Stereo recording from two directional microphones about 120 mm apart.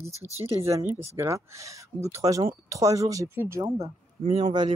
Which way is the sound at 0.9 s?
20° right (ahead or behind).